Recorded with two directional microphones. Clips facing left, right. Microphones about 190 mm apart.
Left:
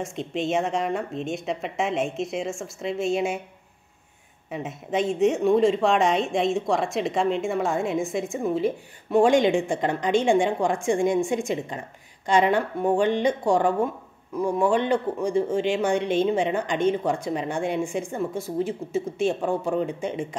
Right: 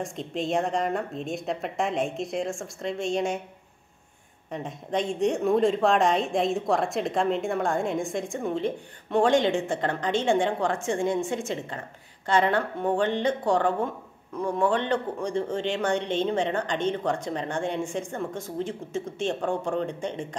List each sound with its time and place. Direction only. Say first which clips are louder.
0.0 s a woman's voice: left 2 dB; centre (ahead or behind)
4.5 s a woman's voice: left 2 dB; 5° left (ahead or behind)